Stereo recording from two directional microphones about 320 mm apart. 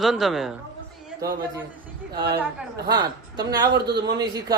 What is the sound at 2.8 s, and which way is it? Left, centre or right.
Speech, centre.